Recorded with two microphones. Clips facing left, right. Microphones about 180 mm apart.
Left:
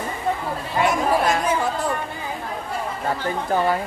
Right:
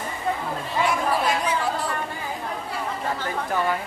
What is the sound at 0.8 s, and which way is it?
Chatter, 45° left (ahead or behind).